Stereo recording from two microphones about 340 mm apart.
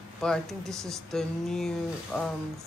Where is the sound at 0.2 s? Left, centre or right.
Centre.